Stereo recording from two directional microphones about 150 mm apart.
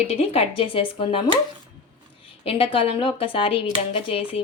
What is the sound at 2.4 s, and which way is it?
Speech, 35° left (ahead or behind).